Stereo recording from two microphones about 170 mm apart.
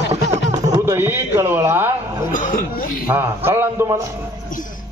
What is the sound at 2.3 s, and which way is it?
Speech, 50° left (ahead or behind).